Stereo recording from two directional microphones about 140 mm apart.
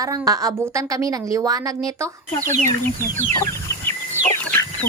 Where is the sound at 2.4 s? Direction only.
60° right (ahead or behind).